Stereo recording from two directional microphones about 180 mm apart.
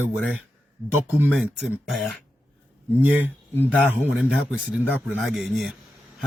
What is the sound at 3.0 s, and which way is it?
Speech, 10° right (ahead or behind).